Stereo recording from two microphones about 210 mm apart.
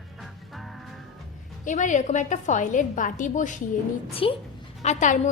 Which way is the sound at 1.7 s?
35° left (ahead or behind).